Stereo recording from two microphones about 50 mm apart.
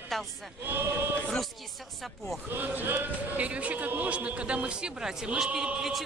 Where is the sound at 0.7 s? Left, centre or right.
Right.